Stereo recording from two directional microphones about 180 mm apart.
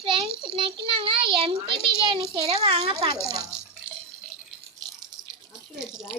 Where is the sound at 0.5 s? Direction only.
30° right (ahead or behind).